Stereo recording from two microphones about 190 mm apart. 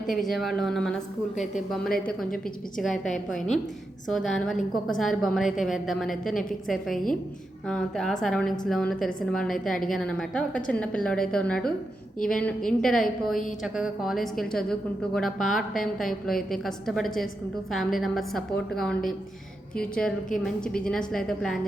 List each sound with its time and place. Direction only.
0.1 s a woman's voice: centre (ahead or behind)
1.9 s a woman's voice: 50° left (ahead or behind)
2.8 s a woman's voice: 5° left (ahead or behind)
4.1 s a woman's voice: centre (ahead or behind)